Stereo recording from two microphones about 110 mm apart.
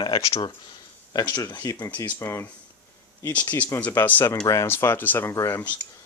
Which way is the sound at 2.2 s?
25° left (ahead or behind).